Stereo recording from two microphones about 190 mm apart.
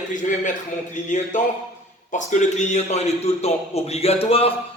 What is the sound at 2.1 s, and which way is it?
A man's voice, 40° left (ahead or behind).